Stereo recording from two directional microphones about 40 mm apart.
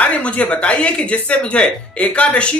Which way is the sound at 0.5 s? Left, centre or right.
Left.